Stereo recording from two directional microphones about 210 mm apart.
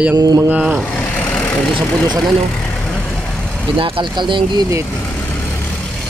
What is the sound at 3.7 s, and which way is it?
Speech, 25° right (ahead or behind).